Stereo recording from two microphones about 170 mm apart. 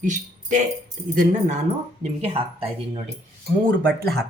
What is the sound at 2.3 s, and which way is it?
Speech, 35° right (ahead or behind).